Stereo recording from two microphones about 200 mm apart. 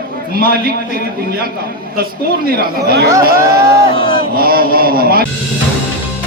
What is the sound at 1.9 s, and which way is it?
A man's voice, 50° right (ahead or behind).